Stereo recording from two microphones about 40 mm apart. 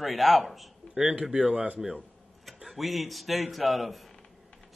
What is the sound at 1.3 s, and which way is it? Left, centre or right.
Speech, right.